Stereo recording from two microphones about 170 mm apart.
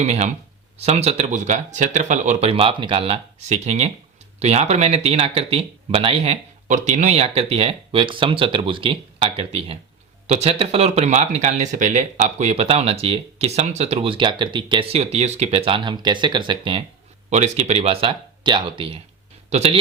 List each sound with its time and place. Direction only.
0.0 s speech: 40° right (ahead or behind)